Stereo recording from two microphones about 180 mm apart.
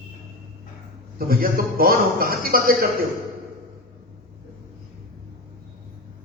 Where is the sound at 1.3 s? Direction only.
55° right (ahead or behind).